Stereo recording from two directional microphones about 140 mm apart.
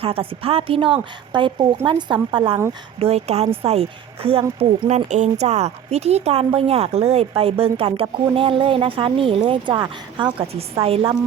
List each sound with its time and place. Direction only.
0.0 s speech: 40° right (ahead or behind)
3.0 s a woman's voice: 50° right (ahead or behind)
4.9 s a woman's voice: 55° right (ahead or behind)